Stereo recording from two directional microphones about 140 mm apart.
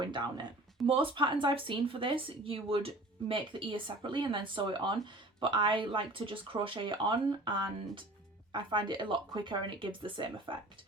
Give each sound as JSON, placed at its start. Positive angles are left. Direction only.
{"t": 0.0, "sound": "speech", "side_deg": -35}